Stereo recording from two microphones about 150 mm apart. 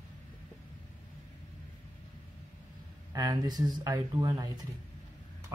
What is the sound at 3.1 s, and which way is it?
Speech, 25° right (ahead or behind).